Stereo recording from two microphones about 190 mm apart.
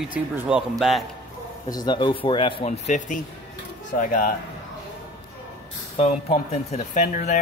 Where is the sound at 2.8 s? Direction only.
40° left (ahead or behind).